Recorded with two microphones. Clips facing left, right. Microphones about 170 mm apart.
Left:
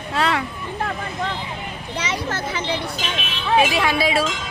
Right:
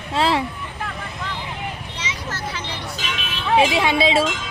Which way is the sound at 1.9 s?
65° left (ahead or behind).